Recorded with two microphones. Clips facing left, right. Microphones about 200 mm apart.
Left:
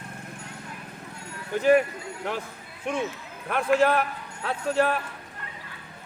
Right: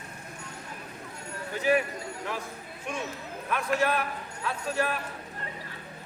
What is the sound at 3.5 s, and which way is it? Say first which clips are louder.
Speech: left 6 dB; 55° left (ahead or behind).